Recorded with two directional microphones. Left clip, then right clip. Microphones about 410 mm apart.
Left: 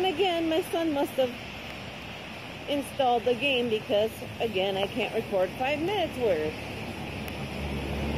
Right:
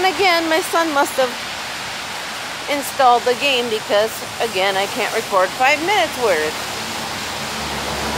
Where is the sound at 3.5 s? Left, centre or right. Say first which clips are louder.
Right 9 dB; right.